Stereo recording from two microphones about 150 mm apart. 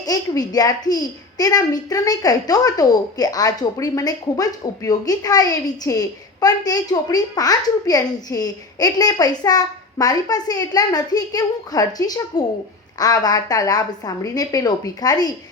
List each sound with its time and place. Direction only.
0.0 s a child's voice: 25° left (ahead or behind)